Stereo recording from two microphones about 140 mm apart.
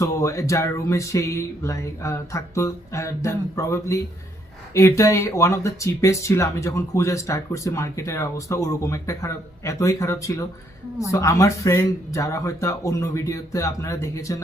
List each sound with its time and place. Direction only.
0.0 s speech: 20° left (ahead or behind)